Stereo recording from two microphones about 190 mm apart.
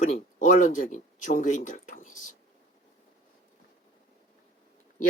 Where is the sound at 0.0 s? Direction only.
40° left (ahead or behind).